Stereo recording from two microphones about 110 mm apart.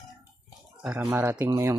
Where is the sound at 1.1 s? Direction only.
20° right (ahead or behind).